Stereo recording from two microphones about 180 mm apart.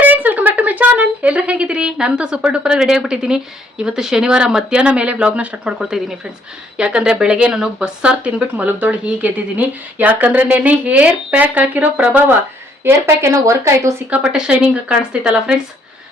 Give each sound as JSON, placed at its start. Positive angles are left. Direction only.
{"t": 0.0, "sound": "a sound", "side_deg": -10}
{"t": 3.8, "sound": "speech", "side_deg": -5}
{"t": 14.2, "sound": "speech", "side_deg": -5}